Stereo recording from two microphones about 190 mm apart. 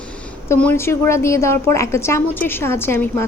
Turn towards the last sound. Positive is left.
turn(degrees=15)  # may be behind; listen again after turning